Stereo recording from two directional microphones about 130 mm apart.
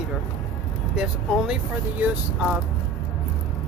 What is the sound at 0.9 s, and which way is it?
Speech, 5° right (ahead or behind).